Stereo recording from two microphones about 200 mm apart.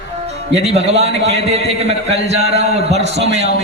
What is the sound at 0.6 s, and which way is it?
A man's voice, 30° right (ahead or behind).